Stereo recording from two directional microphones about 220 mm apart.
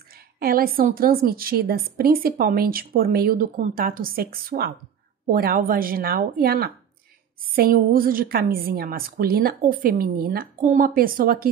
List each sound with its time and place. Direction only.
0.4 s a woman's voice: 40° right (ahead or behind)